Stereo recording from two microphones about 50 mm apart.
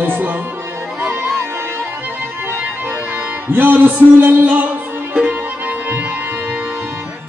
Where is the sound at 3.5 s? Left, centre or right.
Right.